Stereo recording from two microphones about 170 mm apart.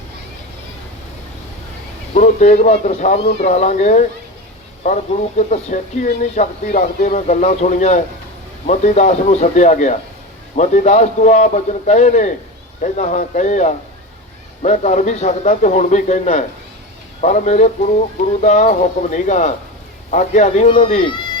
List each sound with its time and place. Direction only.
2.1 s speech: 45° left (ahead or behind)
5.4 s speech: 40° left (ahead or behind)